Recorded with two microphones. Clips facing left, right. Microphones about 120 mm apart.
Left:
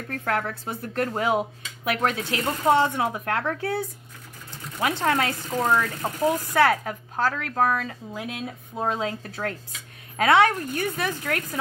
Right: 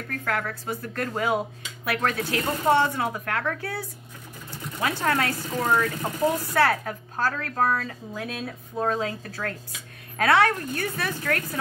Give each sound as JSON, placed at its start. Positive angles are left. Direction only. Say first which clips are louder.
{"t": 0.1, "sound": "a woman's voice", "louder": "left 2 dB", "side_deg": 25}